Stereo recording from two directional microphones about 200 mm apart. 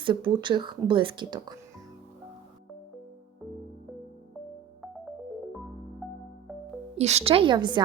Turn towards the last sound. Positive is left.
turn(degrees=-25)  # may be behind; listen again after turning